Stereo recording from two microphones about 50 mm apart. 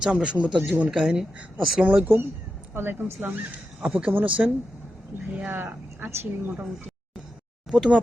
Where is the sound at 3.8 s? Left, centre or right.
Right.